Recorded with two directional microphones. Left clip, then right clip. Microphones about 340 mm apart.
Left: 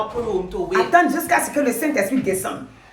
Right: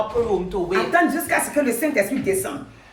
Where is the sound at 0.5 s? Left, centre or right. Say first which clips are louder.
Right 1 dB; right.